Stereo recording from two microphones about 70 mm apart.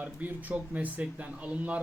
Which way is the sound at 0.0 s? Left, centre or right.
Right.